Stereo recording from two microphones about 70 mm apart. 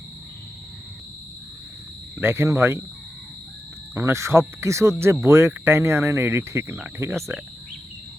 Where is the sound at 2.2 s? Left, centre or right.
Right.